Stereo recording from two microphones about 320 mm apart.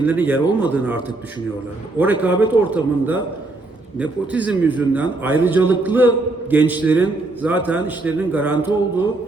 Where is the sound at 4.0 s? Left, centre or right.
Centre.